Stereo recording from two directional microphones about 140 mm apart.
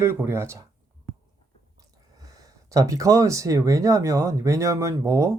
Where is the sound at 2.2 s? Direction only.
25° right (ahead or behind).